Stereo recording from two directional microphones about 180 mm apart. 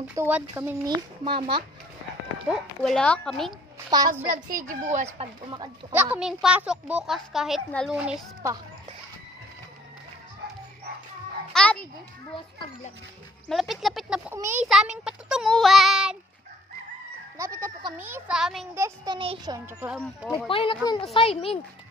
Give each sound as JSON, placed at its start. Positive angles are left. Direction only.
{"t": 0.1, "sound": "speech", "side_deg": -15}
{"t": 0.8, "sound": "a child's voice", "side_deg": -25}
{"t": 2.5, "sound": "speech", "side_deg": 0}
{"t": 3.9, "sound": "a child's voice", "side_deg": -20}
{"t": 4.3, "sound": "a child's voice", "side_deg": -50}
{"t": 5.2, "sound": "a child's voice", "side_deg": -25}
{"t": 5.9, "sound": "speech", "side_deg": -10}
{"t": 11.5, "sound": "a child's voice", "side_deg": 5}
{"t": 13.5, "sound": "speech", "side_deg": 0}
{"t": 17.4, "sound": "speech", "side_deg": -15}
{"t": 18.8, "sound": "speech", "side_deg": -15}
{"t": 19.1, "sound": "a child's voice", "side_deg": -25}
{"t": 20.4, "sound": "a child's voice", "side_deg": 30}